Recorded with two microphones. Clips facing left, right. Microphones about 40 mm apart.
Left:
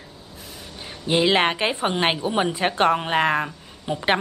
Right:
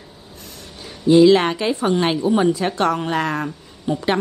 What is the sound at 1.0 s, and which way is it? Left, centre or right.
A woman's voice, left.